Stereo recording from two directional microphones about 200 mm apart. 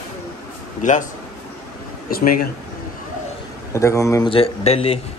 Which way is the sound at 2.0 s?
45° left (ahead or behind).